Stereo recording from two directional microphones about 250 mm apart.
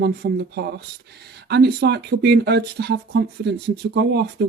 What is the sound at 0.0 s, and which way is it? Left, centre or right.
Speech, right.